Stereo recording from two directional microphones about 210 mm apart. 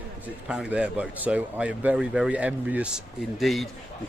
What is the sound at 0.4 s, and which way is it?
Speech, 5° right (ahead or behind).